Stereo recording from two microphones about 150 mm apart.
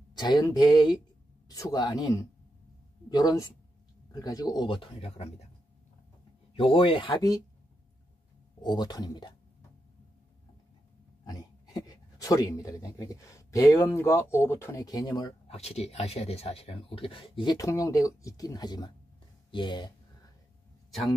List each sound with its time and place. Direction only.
0.1 s speech: 30° left (ahead or behind)
5.1 s speech: 45° left (ahead or behind)
6.5 s speech: 35° left (ahead or behind)
7.2 s speech: 25° left (ahead or behind)
8.6 s speech: 25° left (ahead or behind)
11.2 s a sound: 25° left (ahead or behind)
12.9 s speech: 20° left (ahead or behind)
15.4 s speech: 45° left (ahead or behind)